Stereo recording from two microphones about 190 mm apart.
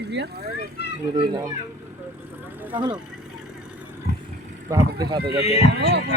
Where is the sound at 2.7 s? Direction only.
25° right (ahead or behind).